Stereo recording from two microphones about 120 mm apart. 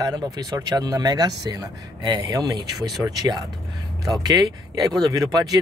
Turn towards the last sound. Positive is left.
turn(degrees=-30)  # may be behind; listen again after turning